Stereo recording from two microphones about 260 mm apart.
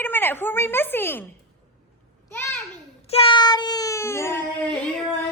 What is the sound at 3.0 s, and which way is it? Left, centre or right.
A woman's voice, left.